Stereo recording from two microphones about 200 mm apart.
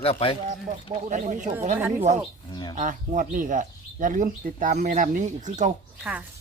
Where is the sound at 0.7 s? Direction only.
35° right (ahead or behind).